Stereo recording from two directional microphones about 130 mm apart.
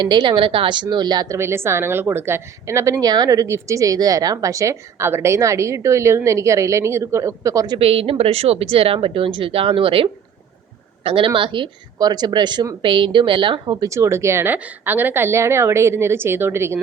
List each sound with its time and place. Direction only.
0.0 s a woman's voice: 35° right (ahead or behind)
7.8 s a woman's voice: 50° right (ahead or behind); by 16.8 s 20° right (ahead or behind)